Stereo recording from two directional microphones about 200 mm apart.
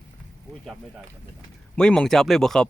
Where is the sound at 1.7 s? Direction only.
5° left (ahead or behind).